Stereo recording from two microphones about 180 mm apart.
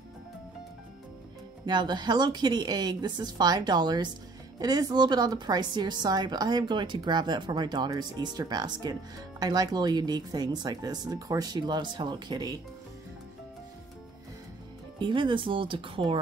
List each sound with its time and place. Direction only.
1.7 s a woman's voice: 25° right (ahead or behind)
15.0 s a woman's voice: 25° right (ahead or behind)